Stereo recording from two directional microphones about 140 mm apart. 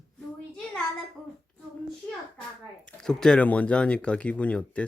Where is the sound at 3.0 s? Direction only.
5° left (ahead or behind).